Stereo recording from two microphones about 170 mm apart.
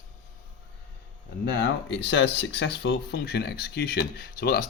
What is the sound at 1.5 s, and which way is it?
Speech, 85° left.